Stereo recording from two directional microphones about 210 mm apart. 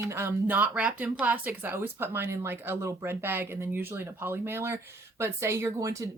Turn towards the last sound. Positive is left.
turn(degrees=-15)  # may be behind; listen again after turning